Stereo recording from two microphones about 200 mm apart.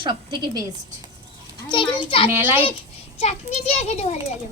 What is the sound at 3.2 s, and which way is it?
Speech, 35° left (ahead or behind).